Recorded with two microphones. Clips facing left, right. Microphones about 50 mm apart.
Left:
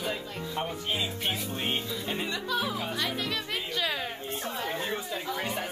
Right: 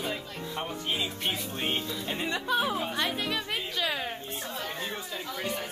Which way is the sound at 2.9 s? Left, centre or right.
Centre.